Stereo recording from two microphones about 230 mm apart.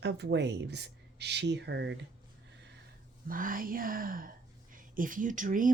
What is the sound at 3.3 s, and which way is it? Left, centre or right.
Speech, right.